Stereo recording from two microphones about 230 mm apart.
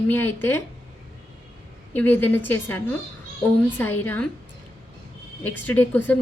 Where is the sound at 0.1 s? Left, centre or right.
Centre.